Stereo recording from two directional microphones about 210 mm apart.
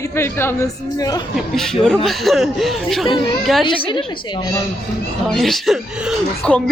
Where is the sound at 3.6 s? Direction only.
25° left (ahead or behind).